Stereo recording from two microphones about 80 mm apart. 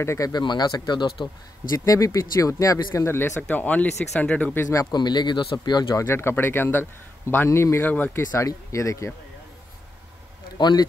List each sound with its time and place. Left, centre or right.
0.0 s speech: left
0.3 s speech: left
1.9 s speech: left
3.4 s speech: centre
4.9 s speech: left
6.0 s speech: left
10.6 s speech: left